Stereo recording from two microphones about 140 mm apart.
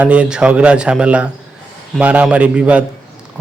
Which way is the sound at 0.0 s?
10° right (ahead or behind).